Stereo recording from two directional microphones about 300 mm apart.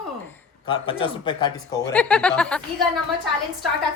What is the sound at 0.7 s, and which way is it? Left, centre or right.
Speech, centre.